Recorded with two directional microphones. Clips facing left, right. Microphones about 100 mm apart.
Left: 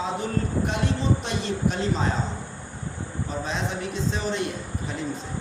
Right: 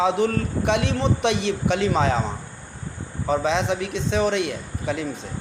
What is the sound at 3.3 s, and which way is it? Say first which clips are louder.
A man's voice: right 10 dB; 80° right.